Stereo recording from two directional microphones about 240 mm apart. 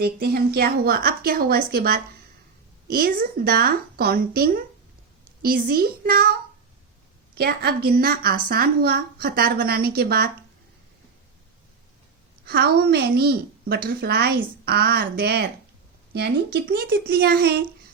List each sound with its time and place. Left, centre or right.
0.0 s a woman's voice: right
7.3 s a woman's voice: right
12.5 s a woman's voice: right